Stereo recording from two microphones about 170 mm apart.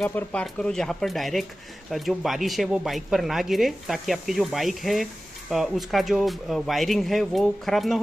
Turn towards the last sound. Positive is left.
turn(degrees=0)  # may be behind; listen again after turning